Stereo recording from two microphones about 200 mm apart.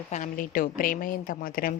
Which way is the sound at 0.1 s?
40° left (ahead or behind).